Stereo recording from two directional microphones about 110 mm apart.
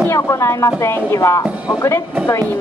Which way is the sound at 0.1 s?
25° left (ahead or behind).